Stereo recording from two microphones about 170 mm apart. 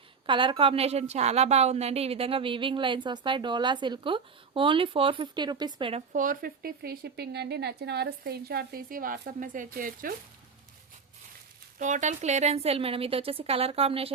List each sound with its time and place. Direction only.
0.3 s a woman's voice: 30° right (ahead or behind)
6.1 s speech: 55° right (ahead or behind)
11.8 s a woman's voice: 45° right (ahead or behind)